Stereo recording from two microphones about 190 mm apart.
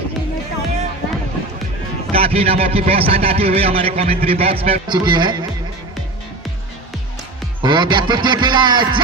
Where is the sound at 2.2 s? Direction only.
30° right (ahead or behind).